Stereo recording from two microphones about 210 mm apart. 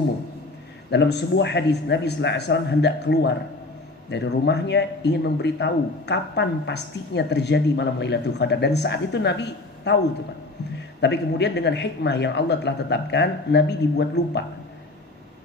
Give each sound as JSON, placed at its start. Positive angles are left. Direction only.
{"t": 0.8, "sound": "a man's voice", "side_deg": 55}
{"t": 11.0, "sound": "a man's voice", "side_deg": 55}